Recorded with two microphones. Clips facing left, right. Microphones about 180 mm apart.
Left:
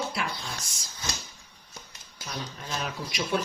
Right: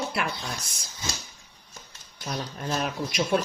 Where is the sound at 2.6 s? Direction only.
45° right (ahead or behind).